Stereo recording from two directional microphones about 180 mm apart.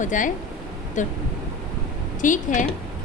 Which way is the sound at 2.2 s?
45° left (ahead or behind).